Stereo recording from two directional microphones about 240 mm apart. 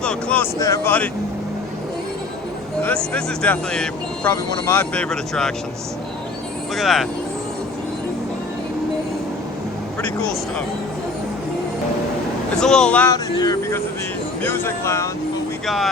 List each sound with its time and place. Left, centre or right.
0.0 s speech: centre
2.8 s speech: centre
6.7 s speech: centre
12.5 s speech: centre
13.3 s speech: centre
15.6 s speech: centre